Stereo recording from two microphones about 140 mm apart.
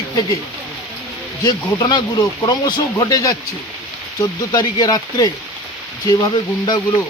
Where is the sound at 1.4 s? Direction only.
25° left (ahead or behind).